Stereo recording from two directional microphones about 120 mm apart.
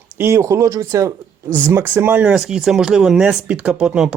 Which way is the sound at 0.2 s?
20° right (ahead or behind).